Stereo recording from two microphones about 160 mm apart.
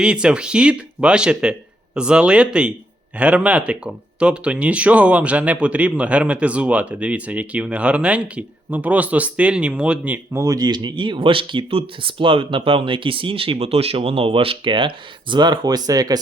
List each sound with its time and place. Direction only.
0.0 s speech: 5° right (ahead or behind)
10.4 s speech: 25° right (ahead or behind)